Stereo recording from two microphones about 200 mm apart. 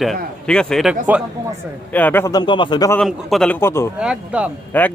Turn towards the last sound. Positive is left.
turn(degrees=10)  # may be behind; listen again after turning